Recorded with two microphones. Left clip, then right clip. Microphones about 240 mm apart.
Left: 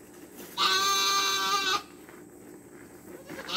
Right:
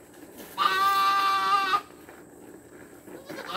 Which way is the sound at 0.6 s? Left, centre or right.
Left.